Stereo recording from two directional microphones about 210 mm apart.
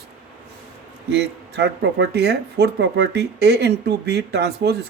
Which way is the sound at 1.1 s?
50° right (ahead or behind).